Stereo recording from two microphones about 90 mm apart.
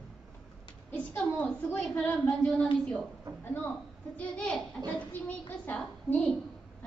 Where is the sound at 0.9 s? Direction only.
15° left (ahead or behind).